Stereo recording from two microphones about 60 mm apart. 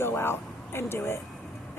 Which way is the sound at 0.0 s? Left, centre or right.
Left.